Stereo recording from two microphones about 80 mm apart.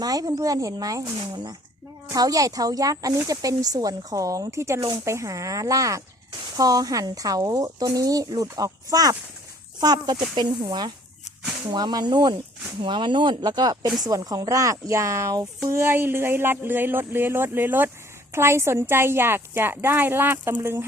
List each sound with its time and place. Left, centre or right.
0.0 s speech: right
10.3 s speech: right
12.8 s speech: right
13.4 s a woman's voice: right